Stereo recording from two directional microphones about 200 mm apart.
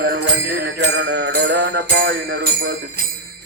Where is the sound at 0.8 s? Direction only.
60° right (ahead or behind).